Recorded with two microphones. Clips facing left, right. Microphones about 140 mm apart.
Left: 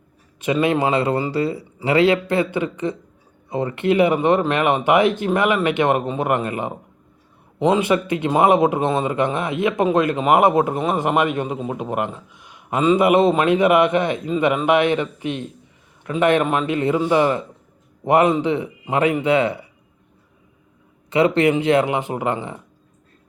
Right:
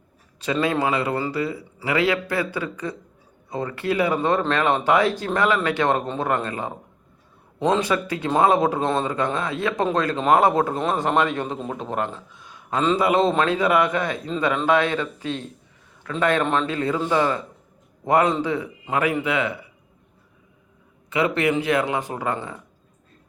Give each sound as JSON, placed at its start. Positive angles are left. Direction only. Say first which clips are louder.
{"t": 0.3, "sound": "speech", "louder": "left 4 dB", "side_deg": 20}
{"t": 7.9, "sound": "speech", "louder": "left 4 dB", "side_deg": 20}
{"t": 16.4, "sound": "speech", "louder": "left 2 dB", "side_deg": 10}
{"t": 16.7, "sound": "a man's voice", "louder": "left 4 dB", "side_deg": 20}
{"t": 21.1, "sound": "speech", "louder": "left 5 dB", "side_deg": 30}